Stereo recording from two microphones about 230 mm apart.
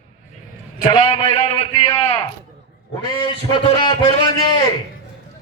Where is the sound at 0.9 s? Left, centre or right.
Centre.